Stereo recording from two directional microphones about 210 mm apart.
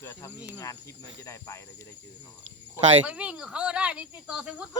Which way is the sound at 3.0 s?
5° right (ahead or behind).